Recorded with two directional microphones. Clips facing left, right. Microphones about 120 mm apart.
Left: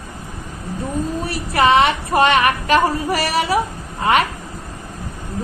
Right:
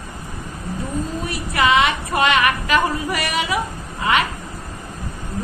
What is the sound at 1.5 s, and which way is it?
Child singing, 35° left (ahead or behind).